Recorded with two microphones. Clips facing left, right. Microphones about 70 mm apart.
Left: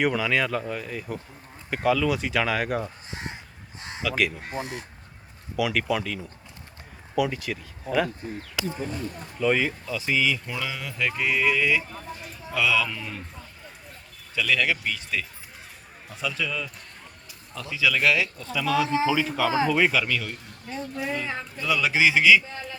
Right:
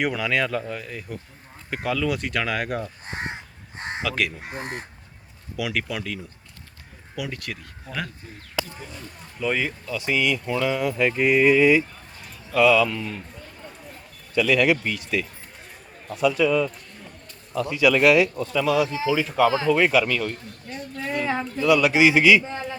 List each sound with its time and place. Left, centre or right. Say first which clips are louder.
0.0 s speech: even; centre
3.1 s speech: right 5 dB; right
3.8 s crow: right 7 dB; right
4.0 s speech: left 2 dB; centre
4.6 s speech: right 2 dB; right
5.5 s speech: left 3 dB; centre
7.2 s speech: left 6 dB; centre
8.6 s speech: right 1 dB; right
9.4 s speech: left 2 dB; centre
10.8 s speech: right 7 dB; centre
12.6 s speech: right 7 dB; centre
14.3 s speech: right 5 dB; centre